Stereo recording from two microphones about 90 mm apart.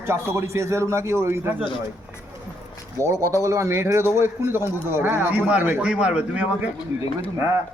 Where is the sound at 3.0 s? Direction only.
35° right (ahead or behind); by 6.5 s 15° right (ahead or behind).